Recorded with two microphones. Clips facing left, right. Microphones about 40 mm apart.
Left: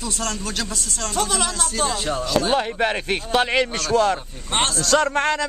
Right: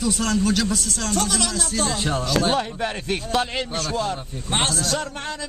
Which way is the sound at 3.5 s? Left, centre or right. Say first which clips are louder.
Left 6 dB; left.